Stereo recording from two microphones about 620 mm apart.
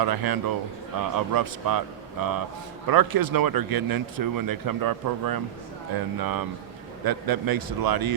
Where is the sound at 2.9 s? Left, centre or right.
Right.